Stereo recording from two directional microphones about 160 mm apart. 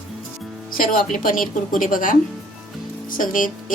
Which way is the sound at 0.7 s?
60° left (ahead or behind).